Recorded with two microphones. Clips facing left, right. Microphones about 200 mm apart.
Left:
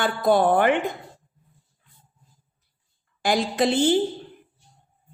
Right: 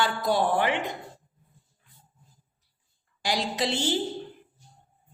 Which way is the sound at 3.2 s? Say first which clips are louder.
Left 6 dB; 50° left (ahead or behind).